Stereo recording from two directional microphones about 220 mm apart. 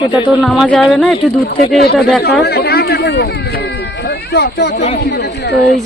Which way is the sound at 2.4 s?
45° left (ahead or behind).